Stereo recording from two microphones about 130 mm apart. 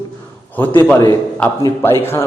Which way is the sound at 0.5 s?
15° left (ahead or behind).